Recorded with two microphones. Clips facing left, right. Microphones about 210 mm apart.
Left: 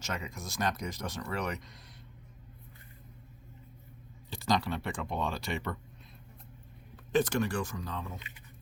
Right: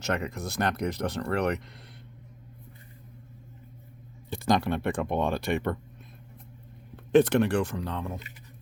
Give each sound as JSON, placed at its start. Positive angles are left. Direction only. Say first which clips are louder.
{"t": 0.0, "sound": "speech", "louder": "right 9 dB", "side_deg": -60}
{"t": 4.3, "sound": "speech", "louder": "right 5 dB", "side_deg": -55}
{"t": 6.9, "sound": "speech", "louder": "right 8 dB", "side_deg": -60}